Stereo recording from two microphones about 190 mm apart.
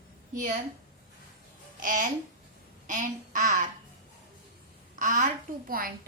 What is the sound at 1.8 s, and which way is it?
A child's voice, 45° right (ahead or behind).